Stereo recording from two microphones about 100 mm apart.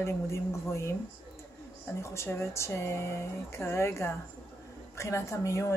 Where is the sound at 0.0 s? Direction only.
25° left (ahead or behind).